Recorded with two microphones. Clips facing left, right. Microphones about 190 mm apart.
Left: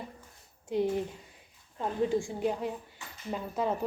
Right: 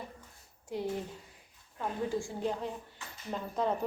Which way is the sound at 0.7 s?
20° left (ahead or behind).